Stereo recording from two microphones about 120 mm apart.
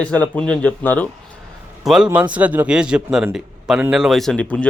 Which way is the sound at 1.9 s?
10° right (ahead or behind).